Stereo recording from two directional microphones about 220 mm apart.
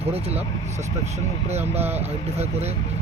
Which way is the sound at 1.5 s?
30° right (ahead or behind).